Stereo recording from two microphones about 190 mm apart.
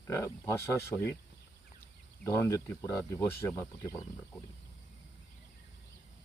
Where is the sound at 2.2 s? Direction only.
15° left (ahead or behind).